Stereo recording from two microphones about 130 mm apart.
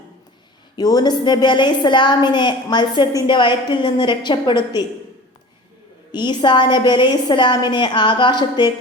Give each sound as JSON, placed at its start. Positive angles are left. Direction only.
{"t": 0.8, "sound": "a woman's voice", "side_deg": 30}
{"t": 6.1, "sound": "a woman's voice", "side_deg": 35}